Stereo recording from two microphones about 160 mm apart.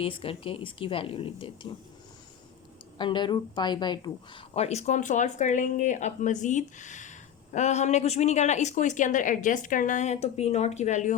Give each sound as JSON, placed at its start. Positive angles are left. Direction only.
{"t": 0.0, "sound": "speech", "side_deg": 35}
{"t": 3.0, "sound": "speech", "side_deg": 30}